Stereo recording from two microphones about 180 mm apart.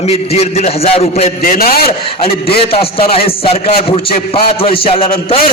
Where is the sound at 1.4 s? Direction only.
55° left (ahead or behind).